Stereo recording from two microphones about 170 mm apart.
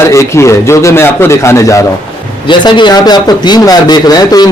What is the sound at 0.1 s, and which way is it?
A man's voice, 15° left (ahead or behind).